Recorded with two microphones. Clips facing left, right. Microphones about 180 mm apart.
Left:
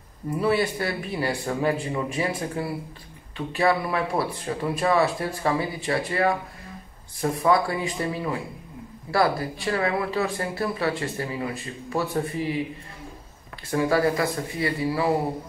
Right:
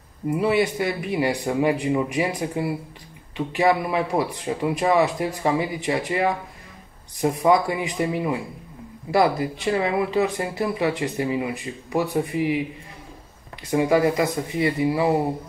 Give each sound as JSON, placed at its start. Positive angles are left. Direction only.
{"t": 0.4, "sound": "speech", "side_deg": -15}
{"t": 13.7, "sound": "speech", "side_deg": -15}